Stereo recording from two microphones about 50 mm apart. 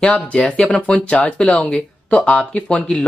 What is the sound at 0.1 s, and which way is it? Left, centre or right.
Speech, left.